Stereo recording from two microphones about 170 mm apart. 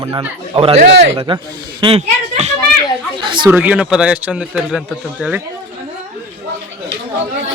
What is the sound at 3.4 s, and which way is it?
A man's voice, 10° right (ahead or behind).